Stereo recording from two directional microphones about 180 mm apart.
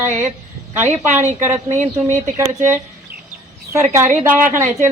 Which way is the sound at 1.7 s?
40° right (ahead or behind).